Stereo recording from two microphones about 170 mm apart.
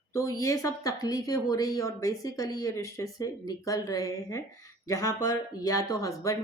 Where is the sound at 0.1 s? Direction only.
20° left (ahead or behind).